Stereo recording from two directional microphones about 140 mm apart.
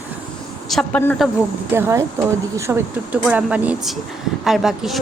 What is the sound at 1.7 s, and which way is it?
A woman's voice, 20° right (ahead or behind).